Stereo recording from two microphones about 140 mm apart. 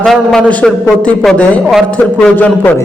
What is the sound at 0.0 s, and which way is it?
A man's voice, centre (ahead or behind).